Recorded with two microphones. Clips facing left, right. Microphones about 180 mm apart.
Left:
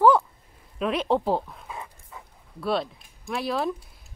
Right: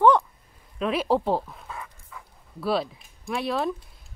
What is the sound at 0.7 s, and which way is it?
Speech, centre (ahead or behind).